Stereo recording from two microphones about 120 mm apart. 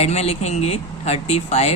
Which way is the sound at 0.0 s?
65° left (ahead or behind).